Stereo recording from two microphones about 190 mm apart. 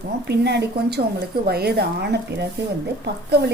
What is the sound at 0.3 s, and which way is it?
A woman's voice, 60° right (ahead or behind).